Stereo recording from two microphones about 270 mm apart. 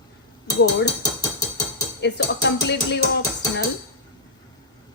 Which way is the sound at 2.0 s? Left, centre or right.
Left.